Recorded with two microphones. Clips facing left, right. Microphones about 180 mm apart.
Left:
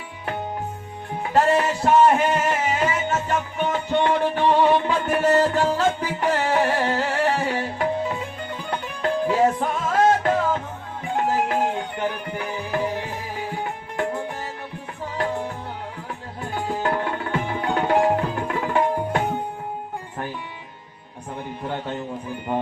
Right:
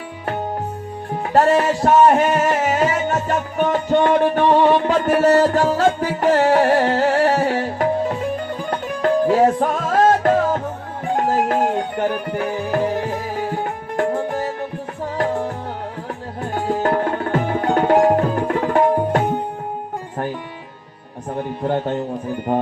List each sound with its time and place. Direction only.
1.3 s music: 40° right (ahead or behind)
21.3 s speech: 45° right (ahead or behind)